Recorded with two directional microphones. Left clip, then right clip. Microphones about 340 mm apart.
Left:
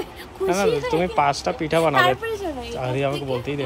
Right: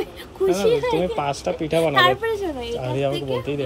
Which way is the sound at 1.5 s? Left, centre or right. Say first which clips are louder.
Even; left.